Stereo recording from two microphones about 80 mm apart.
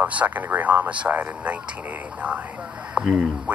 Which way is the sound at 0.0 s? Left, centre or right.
Centre.